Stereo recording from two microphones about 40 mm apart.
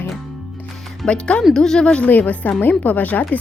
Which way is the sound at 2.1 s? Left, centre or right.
Left.